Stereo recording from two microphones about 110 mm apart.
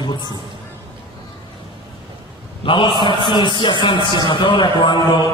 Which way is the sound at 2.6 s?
50° left (ahead or behind).